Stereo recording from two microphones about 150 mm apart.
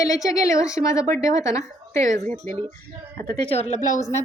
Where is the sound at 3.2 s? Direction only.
40° left (ahead or behind).